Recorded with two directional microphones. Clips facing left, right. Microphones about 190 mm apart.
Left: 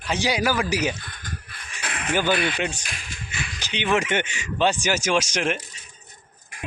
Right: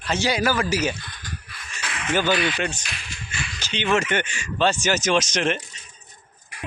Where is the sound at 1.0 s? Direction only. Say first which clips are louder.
Even; 50° left (ahead or behind).